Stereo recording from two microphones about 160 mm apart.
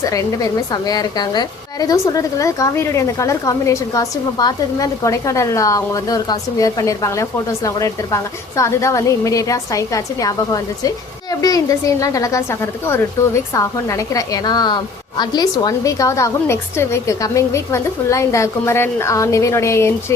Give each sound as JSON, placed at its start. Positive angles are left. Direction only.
{"t": 0.0, "sound": "a woman's voice", "side_deg": 20}